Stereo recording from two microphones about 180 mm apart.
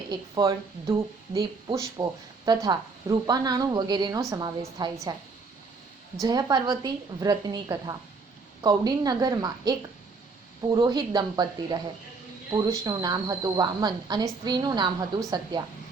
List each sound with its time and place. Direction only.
0.1 s speech: 20° right (ahead or behind)
6.2 s speech: 25° right (ahead or behind)